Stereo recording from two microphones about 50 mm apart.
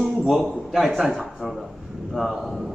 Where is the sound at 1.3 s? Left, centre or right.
Centre.